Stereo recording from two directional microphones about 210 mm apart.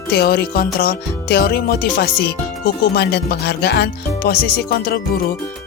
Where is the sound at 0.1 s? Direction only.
50° left (ahead or behind).